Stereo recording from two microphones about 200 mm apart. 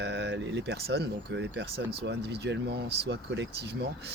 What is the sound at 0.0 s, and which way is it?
Speech, 60° right (ahead or behind).